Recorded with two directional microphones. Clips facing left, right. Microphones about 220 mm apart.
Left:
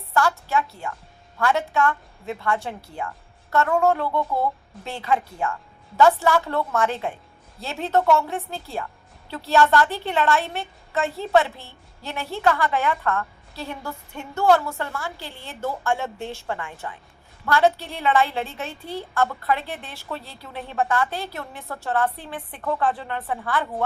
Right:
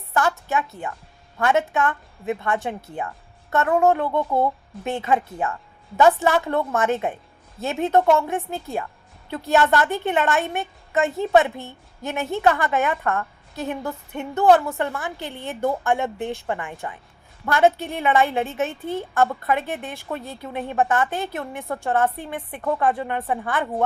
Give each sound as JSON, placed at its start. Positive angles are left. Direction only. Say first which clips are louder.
{"t": 0.1, "sound": "a woman's voice", "louder": "even", "side_deg": -20}